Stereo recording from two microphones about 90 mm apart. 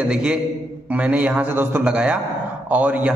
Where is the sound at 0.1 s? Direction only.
10° right (ahead or behind).